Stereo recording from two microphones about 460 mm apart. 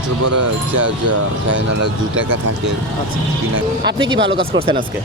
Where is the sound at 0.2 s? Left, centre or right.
Right.